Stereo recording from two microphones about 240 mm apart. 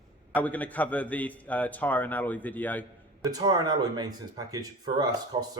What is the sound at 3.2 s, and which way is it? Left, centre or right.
Speech, centre.